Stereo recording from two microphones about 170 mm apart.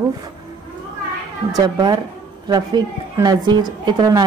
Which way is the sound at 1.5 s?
25° right (ahead or behind).